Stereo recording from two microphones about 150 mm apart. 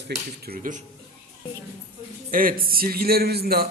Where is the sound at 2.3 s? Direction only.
75° right (ahead or behind); by 3.7 s 90° right.